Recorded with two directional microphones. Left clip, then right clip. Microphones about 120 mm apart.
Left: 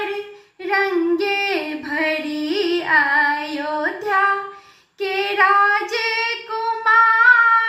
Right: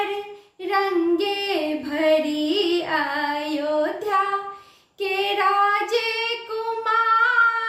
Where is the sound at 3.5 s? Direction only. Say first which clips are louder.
Even; 40° right (ahead or behind).